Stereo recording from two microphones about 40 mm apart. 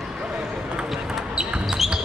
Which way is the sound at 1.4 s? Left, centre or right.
Right.